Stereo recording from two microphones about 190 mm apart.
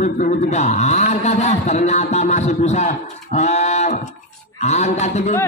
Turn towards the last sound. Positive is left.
turn(degrees=35)  # may be behind; listen again after turning